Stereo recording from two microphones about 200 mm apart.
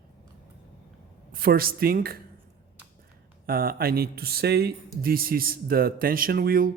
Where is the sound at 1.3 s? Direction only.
45° right (ahead or behind).